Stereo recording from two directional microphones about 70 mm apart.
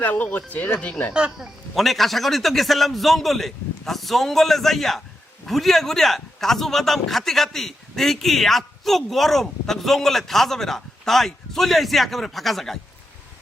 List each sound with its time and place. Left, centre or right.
0.0 s speech: left
1.1 s speech: centre
1.7 s a man's voice: centre